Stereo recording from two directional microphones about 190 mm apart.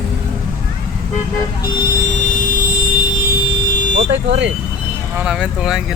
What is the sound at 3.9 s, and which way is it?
Speech, 70° right (ahead or behind).